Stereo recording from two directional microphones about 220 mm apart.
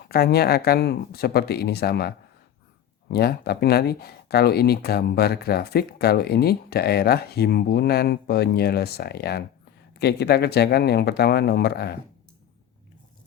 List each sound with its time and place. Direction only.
0.1 s speech: 45° left (ahead or behind)